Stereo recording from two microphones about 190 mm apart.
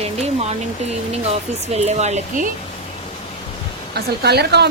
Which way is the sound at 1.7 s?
35° right (ahead or behind).